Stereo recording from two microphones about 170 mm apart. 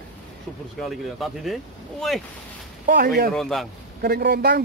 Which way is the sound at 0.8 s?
Centre (ahead or behind).